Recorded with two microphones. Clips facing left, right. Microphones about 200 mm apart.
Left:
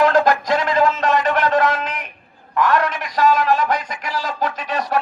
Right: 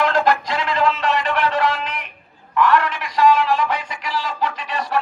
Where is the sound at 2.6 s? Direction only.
45° left (ahead or behind).